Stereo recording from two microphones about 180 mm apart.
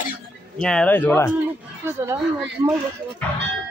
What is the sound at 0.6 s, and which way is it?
Speech, 5° left (ahead or behind).